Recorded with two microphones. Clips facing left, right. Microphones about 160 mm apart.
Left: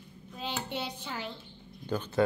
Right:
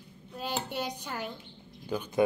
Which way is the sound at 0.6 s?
10° right (ahead or behind).